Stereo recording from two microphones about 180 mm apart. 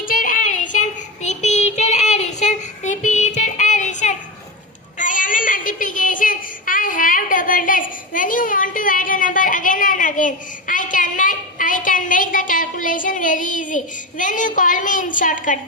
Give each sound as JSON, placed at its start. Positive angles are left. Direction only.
{"t": 0.0, "sound": "child singing", "side_deg": 50}